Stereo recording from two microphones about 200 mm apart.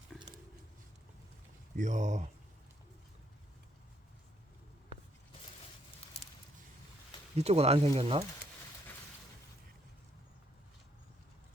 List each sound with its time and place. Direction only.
0.1 s a sound: 5° left (ahead or behind)
1.7 s speech: 35° right (ahead or behind)
7.3 s speech: 30° right (ahead or behind)